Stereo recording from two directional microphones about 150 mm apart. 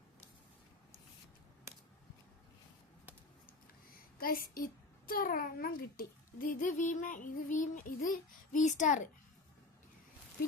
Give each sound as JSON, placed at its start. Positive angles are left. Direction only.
{"t": 4.5, "sound": "a child's voice", "side_deg": 75}